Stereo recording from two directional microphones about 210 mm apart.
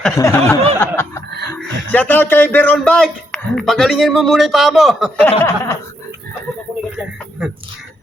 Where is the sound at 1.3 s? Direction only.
50° right (ahead or behind).